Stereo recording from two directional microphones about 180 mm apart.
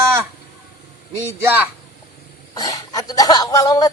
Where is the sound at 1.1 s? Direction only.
15° right (ahead or behind).